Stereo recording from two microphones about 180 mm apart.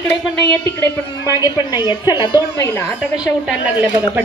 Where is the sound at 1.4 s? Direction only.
25° left (ahead or behind).